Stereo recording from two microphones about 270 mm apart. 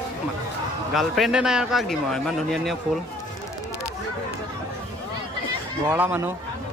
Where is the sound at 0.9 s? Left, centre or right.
Centre.